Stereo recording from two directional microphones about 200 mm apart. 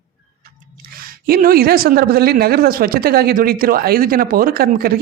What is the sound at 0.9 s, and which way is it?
Speech, 45° right (ahead or behind).